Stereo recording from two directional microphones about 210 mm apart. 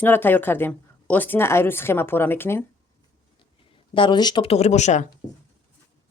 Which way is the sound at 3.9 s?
20° left (ahead or behind).